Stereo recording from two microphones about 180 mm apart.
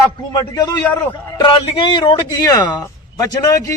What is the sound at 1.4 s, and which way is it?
A man's voice, 30° left (ahead or behind).